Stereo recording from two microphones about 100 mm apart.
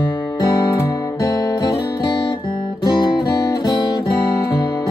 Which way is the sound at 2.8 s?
45° left (ahead or behind).